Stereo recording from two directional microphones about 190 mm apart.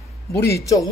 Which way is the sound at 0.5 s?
15° left (ahead or behind).